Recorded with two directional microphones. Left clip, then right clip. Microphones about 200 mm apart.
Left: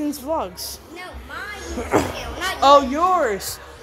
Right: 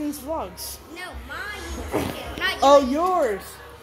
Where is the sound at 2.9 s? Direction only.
Centre (ahead or behind).